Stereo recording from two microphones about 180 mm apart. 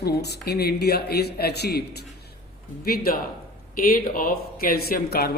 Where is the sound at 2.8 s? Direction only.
55° left (ahead or behind).